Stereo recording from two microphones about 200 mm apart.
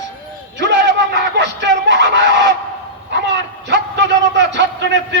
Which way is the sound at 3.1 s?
60° right (ahead or behind).